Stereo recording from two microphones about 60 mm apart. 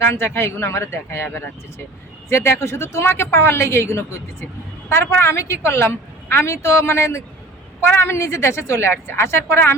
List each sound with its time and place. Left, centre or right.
0.0 s speech: left